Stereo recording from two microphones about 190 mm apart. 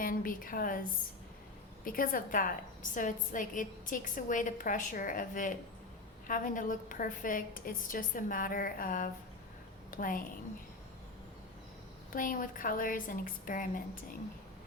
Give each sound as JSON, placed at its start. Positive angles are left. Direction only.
{"t": 0.0, "sound": "a woman's voice", "side_deg": 45}
{"t": 12.1, "sound": "a woman's voice", "side_deg": 45}